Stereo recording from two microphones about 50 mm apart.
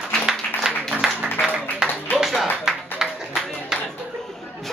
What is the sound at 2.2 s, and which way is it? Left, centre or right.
Clapping, centre.